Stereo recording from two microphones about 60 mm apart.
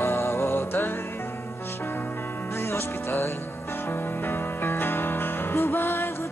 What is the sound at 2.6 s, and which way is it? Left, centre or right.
Music, left.